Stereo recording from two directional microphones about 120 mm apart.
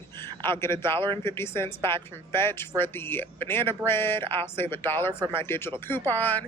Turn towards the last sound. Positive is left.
turn(degrees=15)  # may be behind; listen again after turning